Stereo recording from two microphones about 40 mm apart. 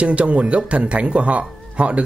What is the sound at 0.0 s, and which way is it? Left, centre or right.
Speech, right.